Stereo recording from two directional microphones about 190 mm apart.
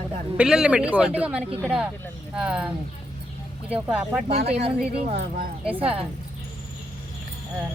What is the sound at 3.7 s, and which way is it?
Speech, 5° right (ahead or behind).